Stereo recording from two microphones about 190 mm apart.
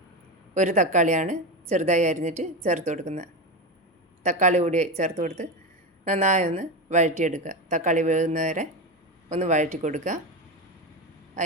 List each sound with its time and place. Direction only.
0.5 s speech: 35° right (ahead or behind)